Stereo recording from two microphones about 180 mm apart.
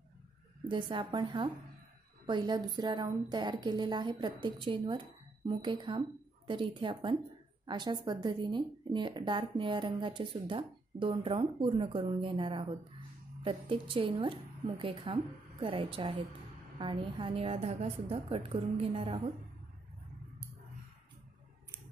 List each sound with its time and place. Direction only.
0.7 s a woman's voice: 25° right (ahead or behind)